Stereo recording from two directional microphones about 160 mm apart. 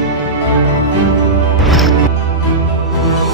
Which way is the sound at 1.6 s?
Centre (ahead or behind).